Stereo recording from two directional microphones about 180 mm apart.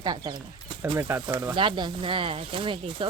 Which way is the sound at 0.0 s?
25° right (ahead or behind).